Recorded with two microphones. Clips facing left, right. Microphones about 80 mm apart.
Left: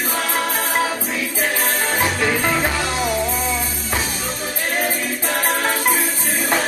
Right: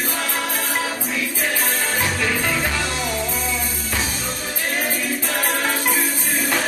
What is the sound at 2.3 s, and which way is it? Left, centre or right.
Music, left.